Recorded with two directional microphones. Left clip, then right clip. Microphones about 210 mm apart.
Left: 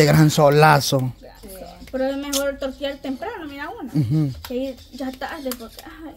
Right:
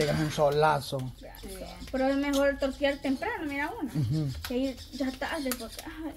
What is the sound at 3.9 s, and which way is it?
Speech, 50° left (ahead or behind).